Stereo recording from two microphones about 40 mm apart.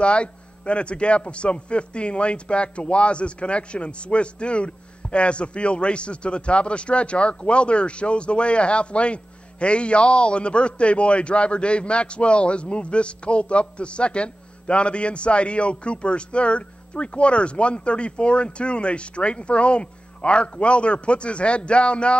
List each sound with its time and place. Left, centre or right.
0.0 s a man's voice: left